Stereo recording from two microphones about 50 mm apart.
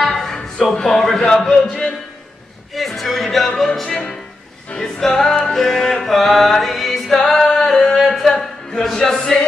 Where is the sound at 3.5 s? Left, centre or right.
Centre.